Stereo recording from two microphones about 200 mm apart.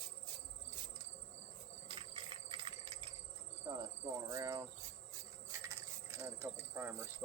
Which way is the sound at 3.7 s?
25° right (ahead or behind).